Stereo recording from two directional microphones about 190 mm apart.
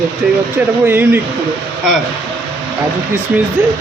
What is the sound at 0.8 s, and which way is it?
Speech, 10° right (ahead or behind).